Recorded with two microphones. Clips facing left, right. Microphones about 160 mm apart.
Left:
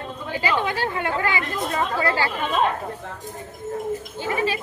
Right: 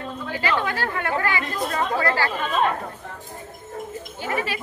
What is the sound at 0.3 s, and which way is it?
A woman's voice, 20° left (ahead or behind).